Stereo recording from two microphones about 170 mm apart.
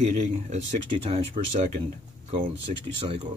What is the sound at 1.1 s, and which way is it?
Speech, 40° right (ahead or behind).